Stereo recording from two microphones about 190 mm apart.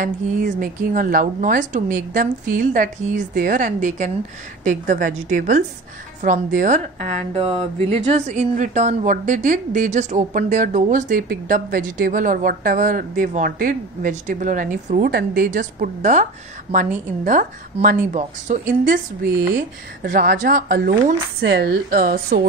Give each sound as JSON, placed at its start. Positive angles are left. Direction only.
{"t": 0.0, "sound": "a woman's voice", "side_deg": -45}